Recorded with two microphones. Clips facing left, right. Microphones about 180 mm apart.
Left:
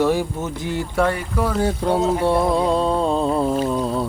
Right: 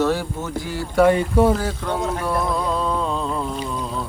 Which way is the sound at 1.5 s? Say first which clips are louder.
Left 5 dB; 30° left (ahead or behind).